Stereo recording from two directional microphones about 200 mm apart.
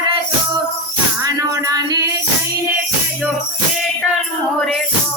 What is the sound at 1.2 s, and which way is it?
Music, 15° right (ahead or behind).